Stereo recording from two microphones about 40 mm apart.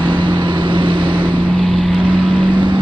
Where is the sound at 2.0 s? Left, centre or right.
Right.